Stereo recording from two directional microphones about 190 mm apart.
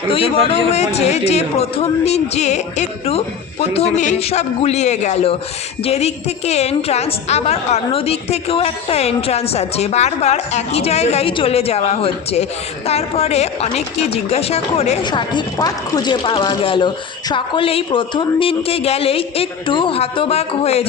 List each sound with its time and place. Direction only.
0.1 s a woman's voice: 30° left (ahead or behind)